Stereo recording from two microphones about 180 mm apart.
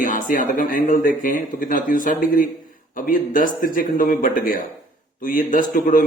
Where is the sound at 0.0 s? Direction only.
45° left (ahead or behind).